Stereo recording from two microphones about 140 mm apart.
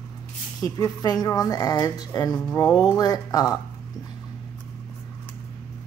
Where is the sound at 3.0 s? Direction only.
25° left (ahead or behind).